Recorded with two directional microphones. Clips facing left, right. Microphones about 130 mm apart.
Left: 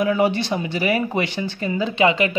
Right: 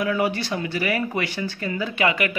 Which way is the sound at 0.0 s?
25° left (ahead or behind).